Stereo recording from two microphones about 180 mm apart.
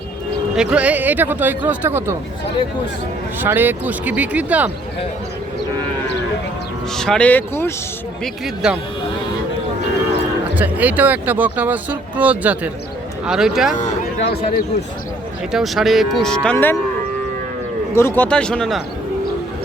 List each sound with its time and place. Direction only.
0.5 s speech: 5° right (ahead or behind)
3.4 s speech: 10° right (ahead or behind)
6.9 s speech: 5° left (ahead or behind)
8.2 s cattle: centre (ahead or behind)
10.5 s speech: 10° right (ahead or behind)
13.2 s cattle: 5° right (ahead or behind)
14.2 s a man's voice: 65° left (ahead or behind)
15.5 s cattle: centre (ahead or behind)
17.9 s cattle: 10° left (ahead or behind)